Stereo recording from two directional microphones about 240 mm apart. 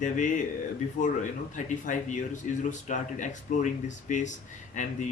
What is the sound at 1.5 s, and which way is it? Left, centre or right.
Speech, left.